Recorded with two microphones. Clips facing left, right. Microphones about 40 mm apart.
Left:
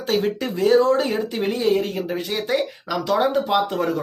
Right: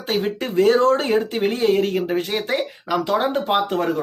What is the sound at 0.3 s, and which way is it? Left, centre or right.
Speech, right.